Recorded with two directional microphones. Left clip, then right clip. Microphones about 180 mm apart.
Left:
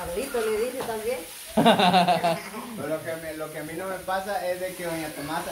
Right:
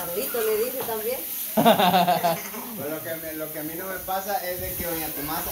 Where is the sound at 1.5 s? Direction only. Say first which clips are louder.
Right 1 dB; 5° right (ahead or behind).